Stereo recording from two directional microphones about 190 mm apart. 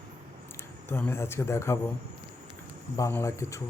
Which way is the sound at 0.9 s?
10° left (ahead or behind).